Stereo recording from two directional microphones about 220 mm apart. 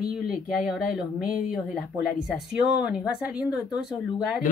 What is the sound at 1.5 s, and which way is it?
A woman's voice, 5° right (ahead or behind).